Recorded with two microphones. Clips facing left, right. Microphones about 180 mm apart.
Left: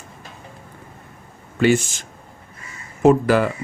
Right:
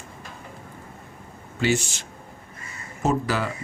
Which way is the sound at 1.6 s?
55° left (ahead or behind).